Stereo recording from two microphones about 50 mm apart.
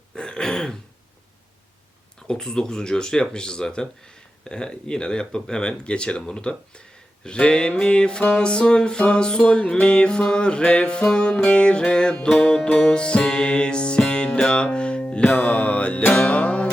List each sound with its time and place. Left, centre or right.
0.2 s throat clearing: centre
2.2 s speech: centre
7.3 s music: centre
8.3 s speech: centre
9.8 s music: centre